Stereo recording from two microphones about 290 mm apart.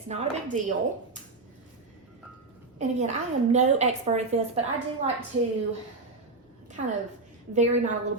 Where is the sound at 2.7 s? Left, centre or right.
Right.